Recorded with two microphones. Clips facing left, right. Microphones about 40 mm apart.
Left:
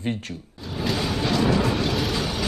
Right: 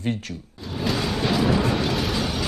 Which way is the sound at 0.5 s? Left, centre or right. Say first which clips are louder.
Right 1 dB; centre.